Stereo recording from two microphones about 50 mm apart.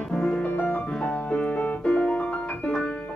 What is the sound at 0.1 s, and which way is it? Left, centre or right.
Music, centre.